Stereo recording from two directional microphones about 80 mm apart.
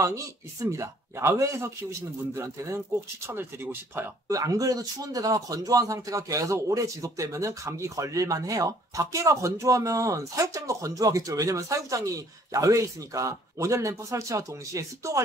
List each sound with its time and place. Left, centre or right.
0.0 s speech: right
4.3 s speech: right